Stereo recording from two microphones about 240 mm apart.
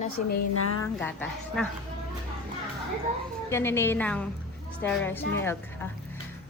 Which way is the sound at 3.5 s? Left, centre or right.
Centre.